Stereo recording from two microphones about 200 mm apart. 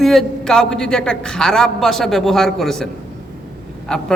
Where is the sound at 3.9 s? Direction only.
5° left (ahead or behind).